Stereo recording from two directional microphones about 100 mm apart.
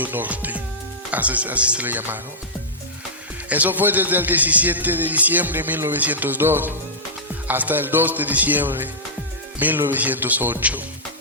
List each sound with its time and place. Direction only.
0.0 s speech: 15° right (ahead or behind)
3.5 s speech: 15° right (ahead or behind)